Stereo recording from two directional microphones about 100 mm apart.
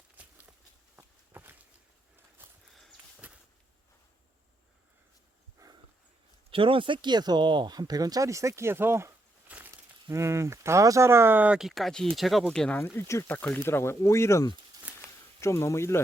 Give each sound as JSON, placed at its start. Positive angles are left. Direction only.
{"t": 0.2, "sound": "walk", "side_deg": -15}
{"t": 2.4, "sound": "a sound", "side_deg": -20}
{"t": 5.6, "sound": "horse", "side_deg": -35}
{"t": 6.5, "sound": "speech", "side_deg": -60}
{"t": 9.5, "sound": "a sound", "side_deg": -15}
{"t": 10.1, "sound": "speech", "side_deg": -30}
{"t": 11.6, "sound": "speech", "side_deg": 0}
{"t": 12.8, "sound": "speech", "side_deg": 25}